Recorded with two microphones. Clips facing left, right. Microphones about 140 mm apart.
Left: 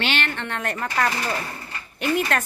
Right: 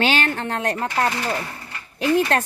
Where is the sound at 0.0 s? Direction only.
40° right (ahead or behind).